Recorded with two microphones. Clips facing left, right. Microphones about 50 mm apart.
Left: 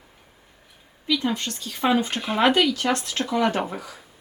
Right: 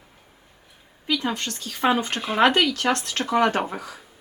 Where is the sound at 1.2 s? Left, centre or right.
Right.